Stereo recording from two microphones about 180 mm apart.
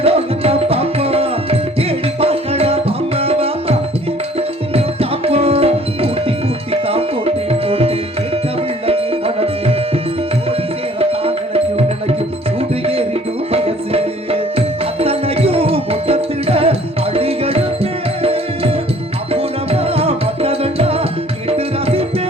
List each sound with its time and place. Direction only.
0.0 s music: 35° right (ahead or behind)
6.8 s tabla: 35° right (ahead or behind)
8.9 s music: 35° right (ahead or behind)
11.0 s tabla: 35° right (ahead or behind)
12.5 s music: 35° right (ahead or behind)